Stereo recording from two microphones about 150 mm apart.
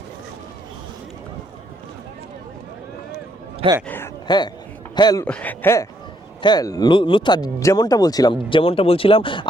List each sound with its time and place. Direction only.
3.8 s a sound: 15° left (ahead or behind)
4.3 s speech: 30° left (ahead or behind)
5.2 s speech: 10° left (ahead or behind); by 9.5 s 35° left (ahead or behind)